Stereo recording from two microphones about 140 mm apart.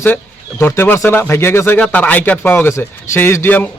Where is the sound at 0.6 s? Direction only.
15° left (ahead or behind).